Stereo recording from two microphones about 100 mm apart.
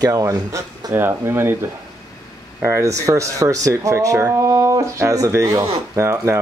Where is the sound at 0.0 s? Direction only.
35° right (ahead or behind).